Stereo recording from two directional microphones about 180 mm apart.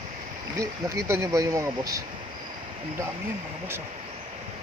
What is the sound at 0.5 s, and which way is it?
Speech, 20° right (ahead or behind).